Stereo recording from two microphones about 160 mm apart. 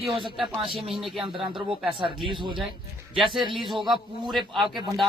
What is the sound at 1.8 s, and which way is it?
Speech, 30° right (ahead or behind).